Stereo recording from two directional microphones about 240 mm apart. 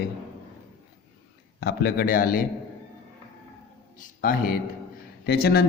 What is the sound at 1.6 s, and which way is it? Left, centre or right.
Speech, left.